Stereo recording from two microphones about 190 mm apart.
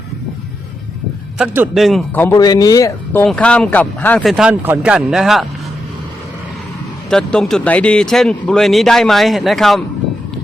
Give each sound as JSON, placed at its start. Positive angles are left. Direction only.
{"t": 1.4, "sound": "speech", "side_deg": -5}
{"t": 2.2, "sound": "speech", "side_deg": 20}
{"t": 7.1, "sound": "speech", "side_deg": 5}